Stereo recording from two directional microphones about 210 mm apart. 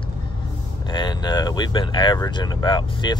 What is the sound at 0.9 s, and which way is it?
Speech, 20° left (ahead or behind).